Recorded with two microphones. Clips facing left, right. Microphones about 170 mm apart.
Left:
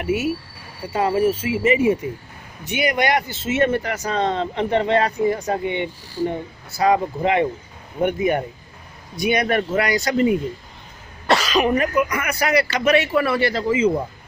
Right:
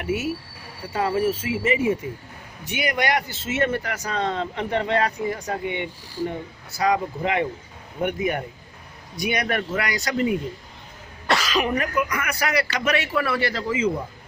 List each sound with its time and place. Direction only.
0.0 s speech: 15° left (ahead or behind)